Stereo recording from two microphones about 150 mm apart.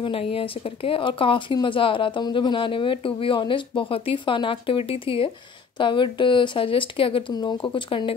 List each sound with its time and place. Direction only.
0.0 s speech: 40° left (ahead or behind)